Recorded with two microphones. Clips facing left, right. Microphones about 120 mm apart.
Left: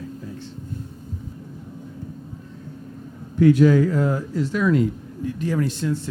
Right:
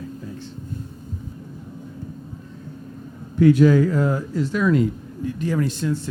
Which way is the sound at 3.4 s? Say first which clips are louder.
Right 1 dB; 20° right (ahead or behind).